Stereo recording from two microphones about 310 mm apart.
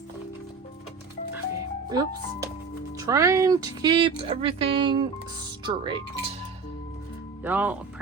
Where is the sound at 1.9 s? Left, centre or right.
Centre.